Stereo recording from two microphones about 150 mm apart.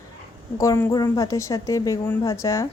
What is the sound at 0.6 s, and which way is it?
A woman's voice, 20° left (ahead or behind).